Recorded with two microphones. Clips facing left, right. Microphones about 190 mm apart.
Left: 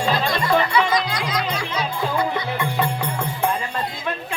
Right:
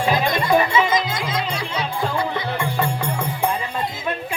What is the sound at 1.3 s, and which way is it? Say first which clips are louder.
Music: even; 30° right (ahead or behind).